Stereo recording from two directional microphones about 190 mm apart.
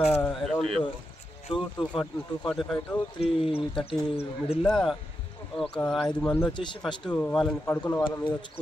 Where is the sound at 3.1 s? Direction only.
25° left (ahead or behind).